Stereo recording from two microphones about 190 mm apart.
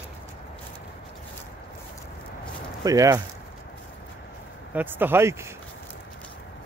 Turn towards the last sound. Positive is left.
turn(degrees=-15)  # may be behind; listen again after turning